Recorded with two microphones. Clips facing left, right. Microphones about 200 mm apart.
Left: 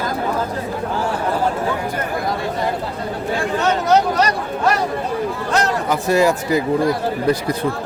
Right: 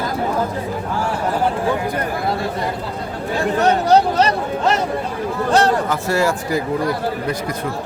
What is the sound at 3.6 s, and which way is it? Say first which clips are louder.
Speech: right 1 dB; 30° right (ahead or behind).